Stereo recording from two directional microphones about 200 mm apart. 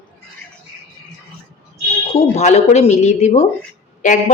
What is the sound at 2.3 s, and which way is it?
A woman's voice, 35° left (ahead or behind).